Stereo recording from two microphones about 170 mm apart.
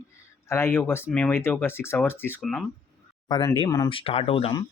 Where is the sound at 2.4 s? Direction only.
Centre (ahead or behind).